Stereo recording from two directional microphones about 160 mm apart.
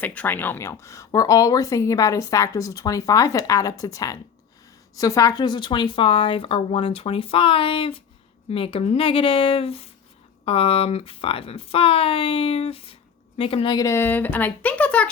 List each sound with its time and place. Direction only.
0.0 s speech: 10° left (ahead or behind)